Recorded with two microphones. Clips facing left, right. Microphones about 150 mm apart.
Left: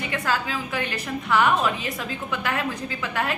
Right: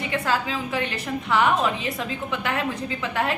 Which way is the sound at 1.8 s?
25° right (ahead or behind).